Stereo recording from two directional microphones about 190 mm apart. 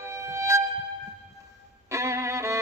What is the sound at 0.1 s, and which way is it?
Music, 15° right (ahead or behind).